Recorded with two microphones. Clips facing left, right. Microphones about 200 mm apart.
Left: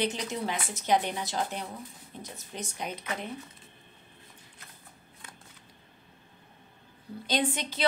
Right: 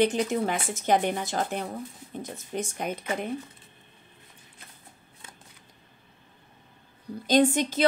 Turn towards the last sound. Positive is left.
turn(degrees=-45)  # may be behind; listen again after turning